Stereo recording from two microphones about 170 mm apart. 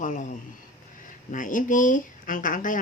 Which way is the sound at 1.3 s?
50° left (ahead or behind).